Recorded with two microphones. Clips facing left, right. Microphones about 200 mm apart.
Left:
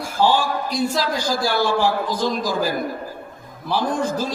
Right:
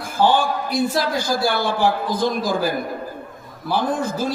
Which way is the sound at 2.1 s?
55° right (ahead or behind).